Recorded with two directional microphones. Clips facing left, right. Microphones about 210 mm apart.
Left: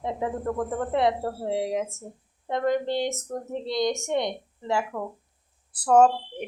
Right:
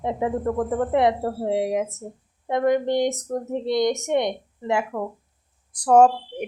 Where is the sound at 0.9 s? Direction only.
15° right (ahead or behind).